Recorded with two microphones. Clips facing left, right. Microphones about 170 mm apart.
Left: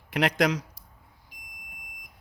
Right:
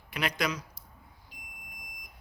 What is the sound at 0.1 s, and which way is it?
Speech, 90° left.